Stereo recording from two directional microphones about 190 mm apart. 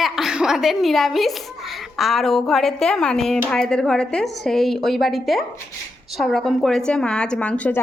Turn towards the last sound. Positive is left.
turn(degrees=5)  # may be behind; listen again after turning